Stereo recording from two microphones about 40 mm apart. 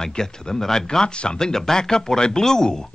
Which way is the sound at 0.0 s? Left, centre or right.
Centre.